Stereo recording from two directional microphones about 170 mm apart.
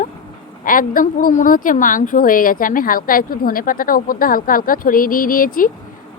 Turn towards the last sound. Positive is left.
turn(degrees=55)  # may be behind; listen again after turning